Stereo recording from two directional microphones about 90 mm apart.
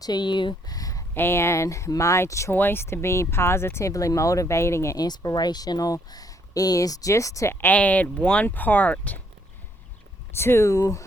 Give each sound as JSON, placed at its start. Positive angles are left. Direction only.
{"t": 0.0, "sound": "speech", "side_deg": 55}
{"t": 0.8, "sound": "a sound", "side_deg": 40}
{"t": 1.1, "sound": "speech", "side_deg": 25}
{"t": 4.9, "sound": "speech", "side_deg": 45}
{"t": 7.5, "sound": "speech", "side_deg": 20}
{"t": 10.3, "sound": "speech", "side_deg": 25}